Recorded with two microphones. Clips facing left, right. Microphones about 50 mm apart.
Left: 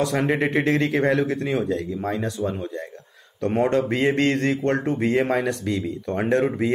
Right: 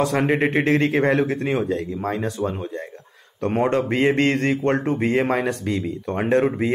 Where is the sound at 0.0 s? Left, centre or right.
Right.